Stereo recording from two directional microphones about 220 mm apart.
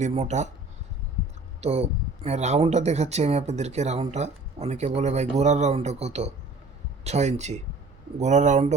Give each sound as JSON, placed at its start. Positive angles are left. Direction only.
{"t": 0.0, "sound": "speech", "side_deg": -30}
{"t": 1.6, "sound": "speech", "side_deg": -30}